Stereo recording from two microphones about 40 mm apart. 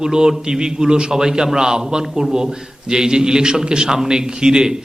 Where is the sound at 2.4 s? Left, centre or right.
Centre.